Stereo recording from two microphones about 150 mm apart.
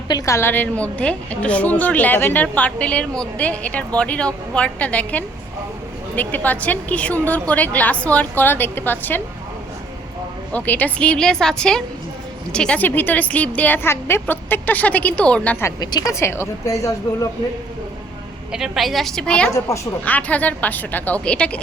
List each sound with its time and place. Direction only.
0.1 s a woman's voice: 20° left (ahead or behind)
10.5 s a woman's voice: 10° left (ahead or behind)
15.6 s speech: 25° left (ahead or behind)
18.5 s a woman's voice: centre (ahead or behind)
19.5 s a woman's voice: 20° left (ahead or behind)